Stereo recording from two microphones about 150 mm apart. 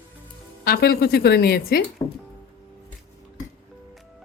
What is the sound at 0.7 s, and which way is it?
A woman's voice, 85° left.